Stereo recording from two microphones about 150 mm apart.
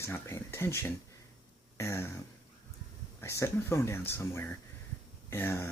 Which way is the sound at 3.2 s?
20° left (ahead or behind).